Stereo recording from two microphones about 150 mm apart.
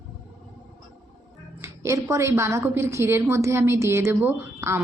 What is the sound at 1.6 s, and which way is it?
A woman's voice, 20° right (ahead or behind).